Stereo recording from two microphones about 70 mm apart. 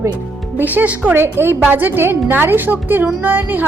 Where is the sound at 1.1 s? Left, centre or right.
Right.